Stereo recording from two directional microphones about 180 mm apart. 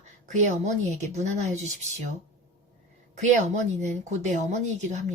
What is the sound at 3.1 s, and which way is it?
Speech, 40° right (ahead or behind).